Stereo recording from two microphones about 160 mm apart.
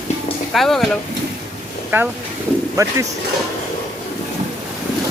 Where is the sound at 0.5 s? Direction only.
Centre (ahead or behind).